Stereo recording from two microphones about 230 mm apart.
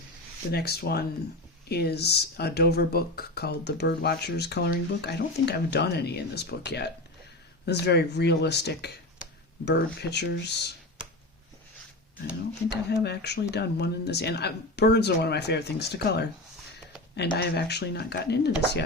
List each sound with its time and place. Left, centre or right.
0.5 s speech: left
12.7 s speech: left
17.3 s speech: left